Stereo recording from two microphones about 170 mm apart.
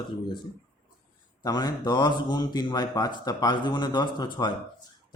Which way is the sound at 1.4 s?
25° left (ahead or behind).